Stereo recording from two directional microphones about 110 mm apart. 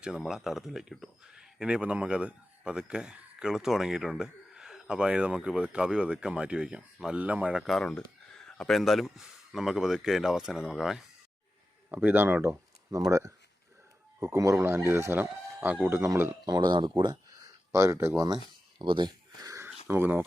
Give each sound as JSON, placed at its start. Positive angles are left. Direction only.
{"t": 0.0, "sound": "speech", "side_deg": -5}
{"t": 7.6, "sound": "speech", "side_deg": 0}
{"t": 11.9, "sound": "speech", "side_deg": -15}
{"t": 16.5, "sound": "speech", "side_deg": -40}
{"t": 17.7, "sound": "speech", "side_deg": -25}
{"t": 18.8, "sound": "speech", "side_deg": -45}
{"t": 19.5, "sound": "sniff", "side_deg": -25}
{"t": 19.9, "sound": "speech", "side_deg": -20}